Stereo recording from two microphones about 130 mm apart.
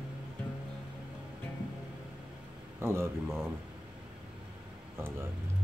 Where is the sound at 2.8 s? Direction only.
15° right (ahead or behind).